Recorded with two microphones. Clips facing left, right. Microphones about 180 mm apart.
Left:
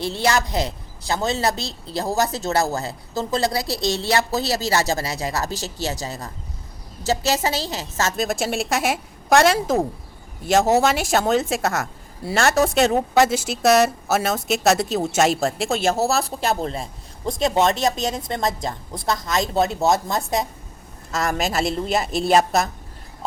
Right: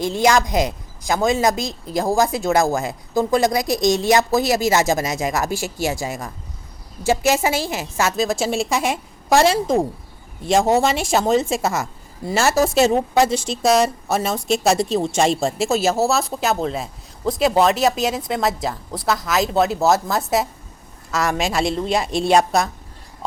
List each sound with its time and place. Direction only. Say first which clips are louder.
0.0 s speech: right 4 dB; 15° right (ahead or behind)
8.1 s a woman's voice: right 3 dB; centre (ahead or behind)